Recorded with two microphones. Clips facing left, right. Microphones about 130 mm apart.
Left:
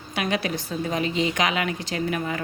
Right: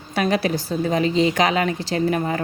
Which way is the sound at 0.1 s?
40° right (ahead or behind).